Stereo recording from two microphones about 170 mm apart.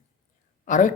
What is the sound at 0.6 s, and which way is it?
Speech, 45° left (ahead or behind).